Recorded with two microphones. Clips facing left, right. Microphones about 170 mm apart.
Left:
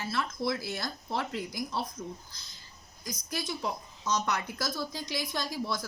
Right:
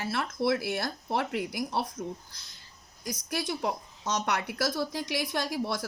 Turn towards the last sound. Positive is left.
turn(degrees=-65)  # may be behind; listen again after turning